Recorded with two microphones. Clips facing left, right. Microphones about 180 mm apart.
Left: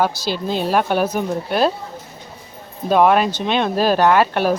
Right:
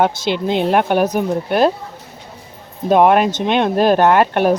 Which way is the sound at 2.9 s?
15° right (ahead or behind).